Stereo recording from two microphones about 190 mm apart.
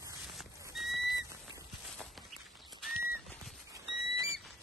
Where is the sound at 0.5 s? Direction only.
15° right (ahead or behind).